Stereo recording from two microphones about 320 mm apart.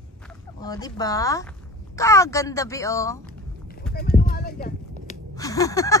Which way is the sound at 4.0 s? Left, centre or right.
Left.